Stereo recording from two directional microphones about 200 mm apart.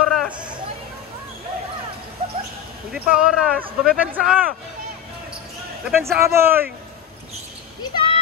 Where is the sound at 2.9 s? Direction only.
5° right (ahead or behind).